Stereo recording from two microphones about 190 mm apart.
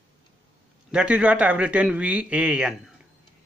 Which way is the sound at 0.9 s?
5° right (ahead or behind).